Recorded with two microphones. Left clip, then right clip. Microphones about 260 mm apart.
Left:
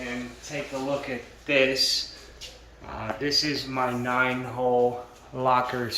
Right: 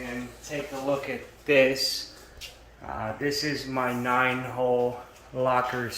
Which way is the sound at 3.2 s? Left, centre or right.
Centre.